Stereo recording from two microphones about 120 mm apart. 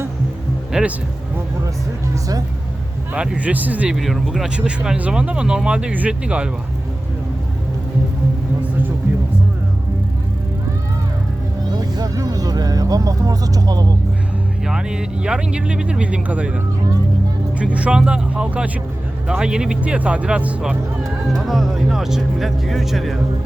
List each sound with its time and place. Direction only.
0.7 s speech: 10° right (ahead or behind)
3.1 s speech: 10° right (ahead or behind)
3.9 s speech: centre (ahead or behind)
11.7 s vehicle: 35° right (ahead or behind)
14.7 s speech: 5° right (ahead or behind)
17.6 s speech: 10° right (ahead or behind)